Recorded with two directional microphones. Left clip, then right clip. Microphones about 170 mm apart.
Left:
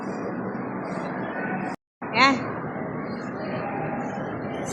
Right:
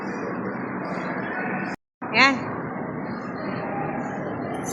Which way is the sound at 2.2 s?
15° right (ahead or behind).